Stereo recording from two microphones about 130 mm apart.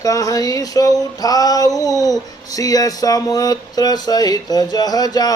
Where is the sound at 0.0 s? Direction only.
25° left (ahead or behind).